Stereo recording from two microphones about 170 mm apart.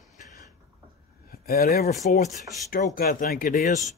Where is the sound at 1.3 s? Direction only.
55° left (ahead or behind).